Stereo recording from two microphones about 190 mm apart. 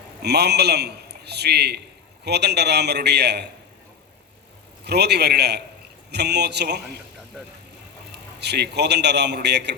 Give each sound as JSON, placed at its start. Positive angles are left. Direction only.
{"t": 0.2, "sound": "a man's voice", "side_deg": -60}
{"t": 4.9, "sound": "a man's voice", "side_deg": -60}
{"t": 8.4, "sound": "a man's voice", "side_deg": -60}